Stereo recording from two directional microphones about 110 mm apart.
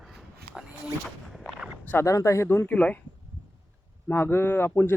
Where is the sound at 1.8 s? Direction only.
15° left (ahead or behind).